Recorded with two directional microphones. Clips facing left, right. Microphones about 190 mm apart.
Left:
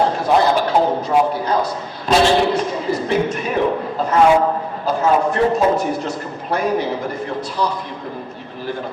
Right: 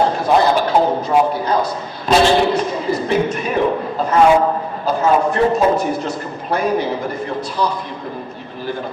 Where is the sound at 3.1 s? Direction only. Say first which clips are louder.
Right 1 dB; 10° right (ahead or behind).